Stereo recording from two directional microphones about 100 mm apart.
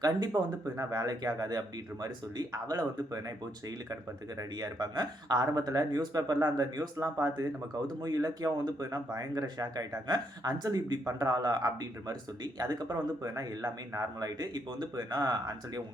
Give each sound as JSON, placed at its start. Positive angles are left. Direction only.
{"t": 0.0, "sound": "speech", "side_deg": -40}
{"t": 4.4, "sound": "speech", "side_deg": -40}